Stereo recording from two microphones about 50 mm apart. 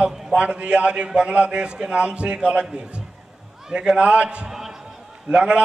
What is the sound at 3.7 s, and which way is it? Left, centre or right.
Speech, centre.